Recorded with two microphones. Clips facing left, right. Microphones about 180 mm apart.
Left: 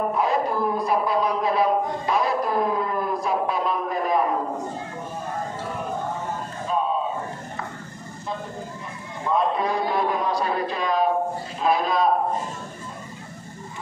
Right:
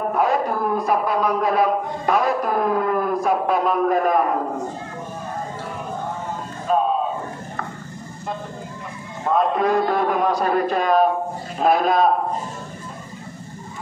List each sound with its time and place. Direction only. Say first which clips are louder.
0.1 s a man's voice: right 3 dB; 55° right (ahead or behind)
9.2 s a man's voice: right 4 dB; 50° right (ahead or behind)